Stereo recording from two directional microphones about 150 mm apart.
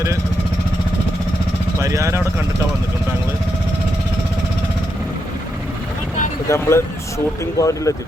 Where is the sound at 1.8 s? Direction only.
20° right (ahead or behind).